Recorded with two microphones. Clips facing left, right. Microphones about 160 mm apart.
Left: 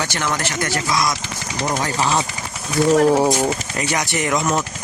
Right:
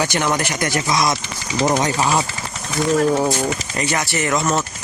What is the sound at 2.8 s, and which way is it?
Speech, 5° left (ahead or behind).